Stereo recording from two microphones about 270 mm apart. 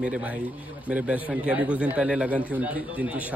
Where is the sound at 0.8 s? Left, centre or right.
Centre.